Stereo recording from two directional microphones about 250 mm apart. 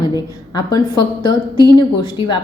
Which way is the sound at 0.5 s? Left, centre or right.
Centre.